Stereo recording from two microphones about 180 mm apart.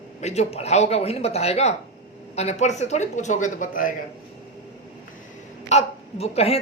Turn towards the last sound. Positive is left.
turn(degrees=35)  # may be behind; listen again after turning